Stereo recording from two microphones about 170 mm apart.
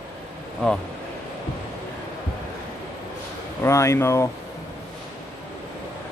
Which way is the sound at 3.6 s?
15° left (ahead or behind).